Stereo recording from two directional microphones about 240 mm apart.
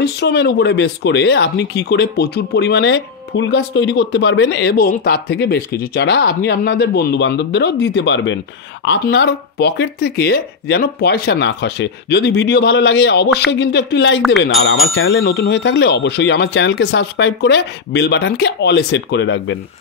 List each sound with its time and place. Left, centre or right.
0.0 s speech: left